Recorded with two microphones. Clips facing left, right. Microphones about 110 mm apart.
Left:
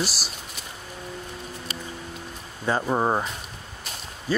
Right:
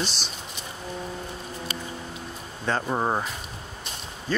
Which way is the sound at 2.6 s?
10° left (ahead or behind).